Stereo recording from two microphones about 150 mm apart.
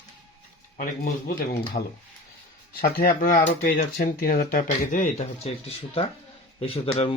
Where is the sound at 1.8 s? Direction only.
60° left (ahead or behind).